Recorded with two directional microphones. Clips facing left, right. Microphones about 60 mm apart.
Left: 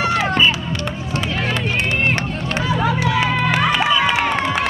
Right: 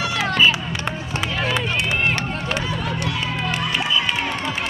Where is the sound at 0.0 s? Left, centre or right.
Left.